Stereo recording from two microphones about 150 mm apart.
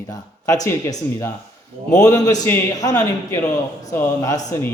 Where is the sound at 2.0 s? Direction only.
20° left (ahead or behind).